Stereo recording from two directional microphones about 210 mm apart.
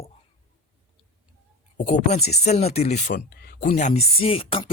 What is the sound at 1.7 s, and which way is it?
A man's voice, 35° left (ahead or behind).